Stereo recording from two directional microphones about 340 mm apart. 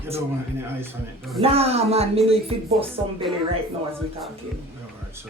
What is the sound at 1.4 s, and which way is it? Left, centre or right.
Speech, centre.